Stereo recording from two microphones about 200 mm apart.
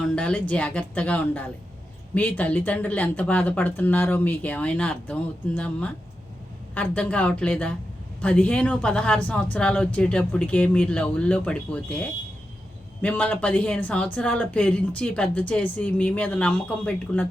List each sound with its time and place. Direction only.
0.2 s speech: 5° left (ahead or behind)